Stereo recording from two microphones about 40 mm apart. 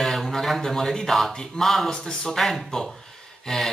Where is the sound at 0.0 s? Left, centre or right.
Centre.